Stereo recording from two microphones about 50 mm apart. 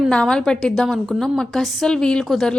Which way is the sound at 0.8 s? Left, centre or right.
Centre.